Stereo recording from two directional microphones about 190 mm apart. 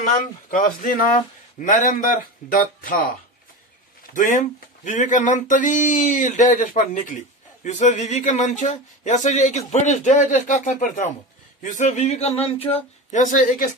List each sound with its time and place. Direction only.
0.0 s speech: 45° left (ahead or behind)